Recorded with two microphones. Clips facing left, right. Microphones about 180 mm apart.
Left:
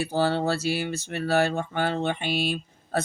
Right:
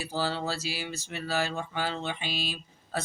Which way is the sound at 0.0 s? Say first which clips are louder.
Left 7 dB; 60° left (ahead or behind).